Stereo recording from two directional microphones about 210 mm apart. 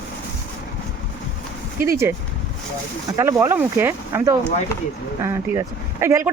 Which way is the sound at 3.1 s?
15° right (ahead or behind).